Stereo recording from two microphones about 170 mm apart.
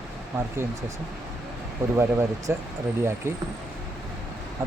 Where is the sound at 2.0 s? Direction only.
15° right (ahead or behind).